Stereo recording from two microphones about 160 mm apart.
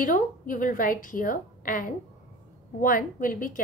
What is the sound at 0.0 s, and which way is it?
A woman's voice, 55° left (ahead or behind).